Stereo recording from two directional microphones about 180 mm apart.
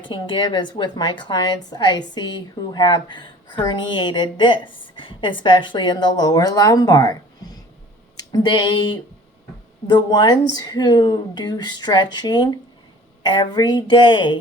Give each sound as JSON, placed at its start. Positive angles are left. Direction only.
{"t": 0.1, "sound": "a woman's voice", "side_deg": 25}
{"t": 8.3, "sound": "a woman's voice", "side_deg": 25}